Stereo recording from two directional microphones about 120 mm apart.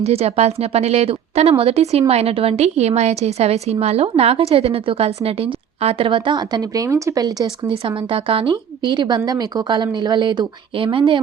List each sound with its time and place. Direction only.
0.0 s a woman's voice: 60° right (ahead or behind); by 7.5 s 30° right (ahead or behind)
7.7 s a woman's voice: 45° right (ahead or behind)